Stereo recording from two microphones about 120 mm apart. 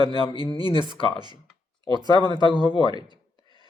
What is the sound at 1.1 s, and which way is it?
Speech, 35° right (ahead or behind).